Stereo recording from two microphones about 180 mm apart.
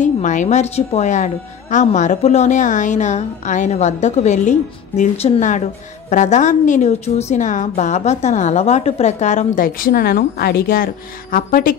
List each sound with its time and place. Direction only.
0.0 s a woman's voice: 45° left (ahead or behind)